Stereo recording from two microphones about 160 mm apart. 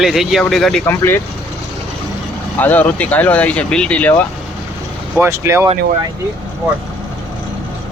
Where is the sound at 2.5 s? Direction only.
10° left (ahead or behind).